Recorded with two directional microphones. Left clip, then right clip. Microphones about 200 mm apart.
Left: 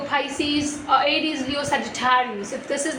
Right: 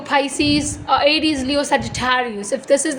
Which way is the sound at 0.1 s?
60° right (ahead or behind).